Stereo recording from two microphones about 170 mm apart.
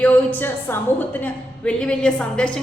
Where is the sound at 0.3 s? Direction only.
10° left (ahead or behind).